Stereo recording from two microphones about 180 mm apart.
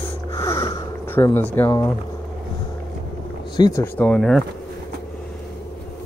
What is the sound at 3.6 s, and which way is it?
Speech, 25° left (ahead or behind).